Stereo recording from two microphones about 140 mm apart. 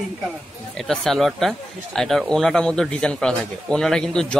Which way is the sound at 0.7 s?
5° left (ahead or behind).